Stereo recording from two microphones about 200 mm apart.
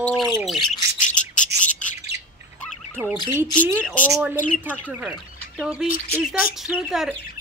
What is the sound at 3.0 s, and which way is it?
Speech, centre (ahead or behind).